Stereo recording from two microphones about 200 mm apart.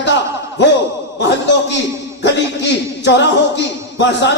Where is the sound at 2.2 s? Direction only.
60° left (ahead or behind).